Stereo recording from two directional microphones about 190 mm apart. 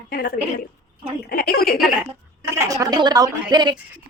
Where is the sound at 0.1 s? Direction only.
55° left (ahead or behind).